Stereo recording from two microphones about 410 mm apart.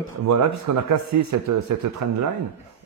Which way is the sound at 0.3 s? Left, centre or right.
Right.